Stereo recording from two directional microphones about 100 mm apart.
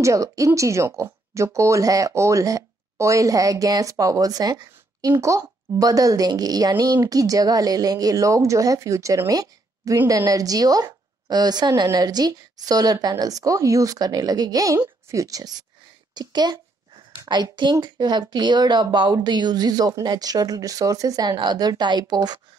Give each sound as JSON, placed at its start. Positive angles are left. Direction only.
{"t": 0.0, "sound": "a child's voice", "side_deg": -30}